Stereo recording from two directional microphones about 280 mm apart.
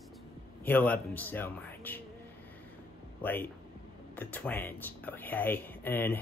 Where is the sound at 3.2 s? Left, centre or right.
Centre.